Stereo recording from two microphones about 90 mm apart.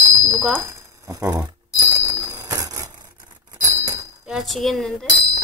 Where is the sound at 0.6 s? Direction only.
30° right (ahead or behind).